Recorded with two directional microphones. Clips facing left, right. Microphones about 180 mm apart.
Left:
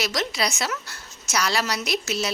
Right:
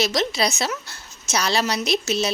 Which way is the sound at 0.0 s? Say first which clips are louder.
Right 4 dB; 25° right (ahead or behind).